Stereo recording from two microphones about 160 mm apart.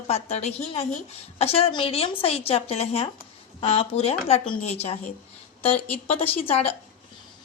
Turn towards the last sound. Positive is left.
turn(degrees=40)  # may be behind; listen again after turning